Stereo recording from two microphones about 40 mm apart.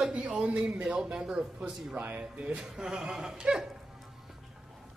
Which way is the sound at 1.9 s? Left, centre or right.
Right.